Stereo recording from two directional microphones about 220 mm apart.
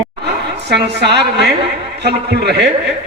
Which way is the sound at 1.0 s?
50° right (ahead or behind).